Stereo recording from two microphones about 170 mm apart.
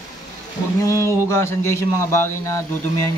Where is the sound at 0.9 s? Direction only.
15° left (ahead or behind).